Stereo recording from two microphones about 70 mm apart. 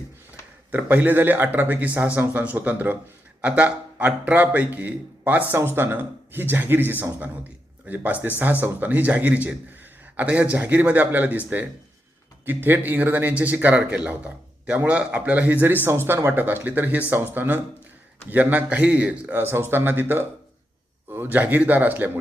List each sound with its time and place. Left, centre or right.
0.7 s speech: right
12.5 s speech: right
19.4 s speech: right